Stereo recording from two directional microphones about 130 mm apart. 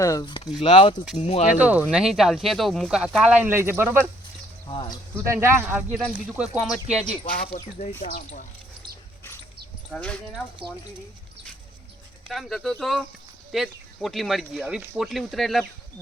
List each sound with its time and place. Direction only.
0.0 s speech: 25° left (ahead or behind)
0.6 s speech: 45° left (ahead or behind)
1.1 s speech: 60° left (ahead or behind)
1.5 s speech: 10° right (ahead or behind)
4.7 s speech: 40° left (ahead or behind)
5.1 s speech: 20° right (ahead or behind)
7.3 s speech: 90° left
9.9 s speech: 10° left (ahead or behind)
12.3 s speech: centre (ahead or behind)